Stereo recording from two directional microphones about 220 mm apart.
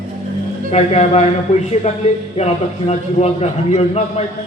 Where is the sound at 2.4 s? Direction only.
30° left (ahead or behind).